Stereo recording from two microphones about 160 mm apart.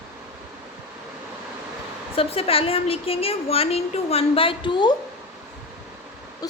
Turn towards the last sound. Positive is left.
turn(degrees=25)  # may be behind; listen again after turning